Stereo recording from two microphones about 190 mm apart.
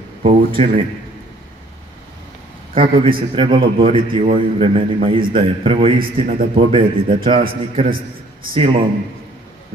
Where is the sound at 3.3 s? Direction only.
30° right (ahead or behind).